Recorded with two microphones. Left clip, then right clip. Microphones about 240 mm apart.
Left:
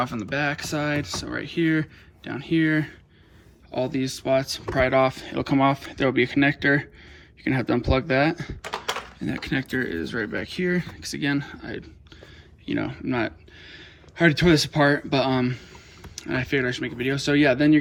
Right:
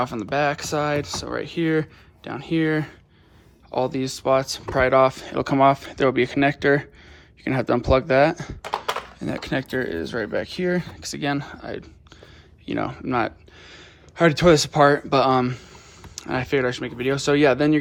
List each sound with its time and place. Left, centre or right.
0.1 s speech: right